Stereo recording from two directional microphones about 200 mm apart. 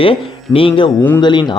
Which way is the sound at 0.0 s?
25° left (ahead or behind).